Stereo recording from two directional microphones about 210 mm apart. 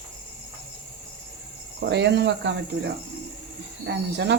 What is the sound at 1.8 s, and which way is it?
Speech, 55° right (ahead or behind).